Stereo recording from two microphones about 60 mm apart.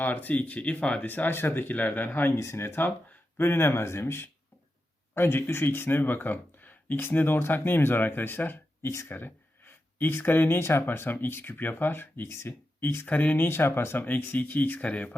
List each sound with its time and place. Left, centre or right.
0.0 s speech: left
1.0 s speech: left
2.3 s speech: left
13.1 s speech: left